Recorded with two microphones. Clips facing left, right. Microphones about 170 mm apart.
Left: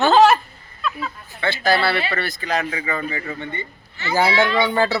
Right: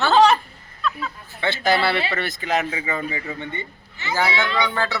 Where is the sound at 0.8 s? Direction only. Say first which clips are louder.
Even; 5° left (ahead or behind).